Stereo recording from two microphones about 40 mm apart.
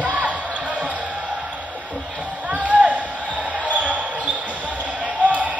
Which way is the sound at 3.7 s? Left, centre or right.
Right.